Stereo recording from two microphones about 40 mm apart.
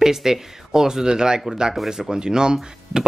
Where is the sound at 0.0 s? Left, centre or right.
Centre.